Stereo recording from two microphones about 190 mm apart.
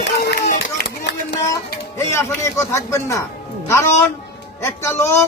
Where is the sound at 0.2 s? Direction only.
50° left (ahead or behind).